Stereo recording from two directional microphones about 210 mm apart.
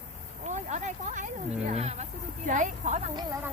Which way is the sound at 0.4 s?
35° right (ahead or behind).